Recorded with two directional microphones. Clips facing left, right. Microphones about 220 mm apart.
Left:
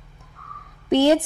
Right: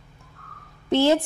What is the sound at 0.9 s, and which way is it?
Speech, 15° left (ahead or behind).